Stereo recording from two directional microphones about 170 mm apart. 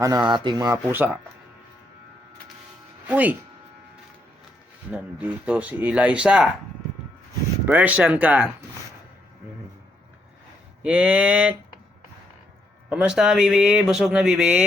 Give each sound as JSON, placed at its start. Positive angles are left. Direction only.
{"t": 0.0, "sound": "speech", "side_deg": -20}
{"t": 3.1, "sound": "speech", "side_deg": -10}
{"t": 4.9, "sound": "speech", "side_deg": -10}
{"t": 7.6, "sound": "speech", "side_deg": -10}
{"t": 10.8, "sound": "speech", "side_deg": -5}
{"t": 12.9, "sound": "speech", "side_deg": -5}